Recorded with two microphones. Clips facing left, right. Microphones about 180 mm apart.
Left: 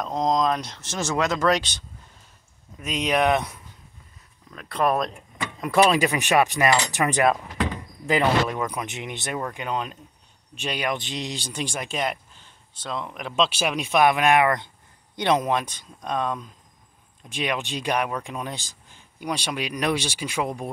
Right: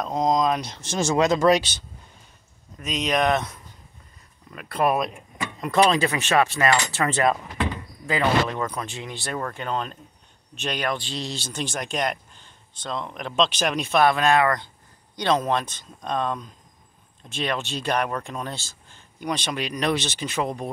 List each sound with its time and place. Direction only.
0.0 s speech: 5° right (ahead or behind)
2.8 s speech: 10° left (ahead or behind)
4.5 s speech: 5° right (ahead or behind)
5.6 s speech: 5° left (ahead or behind)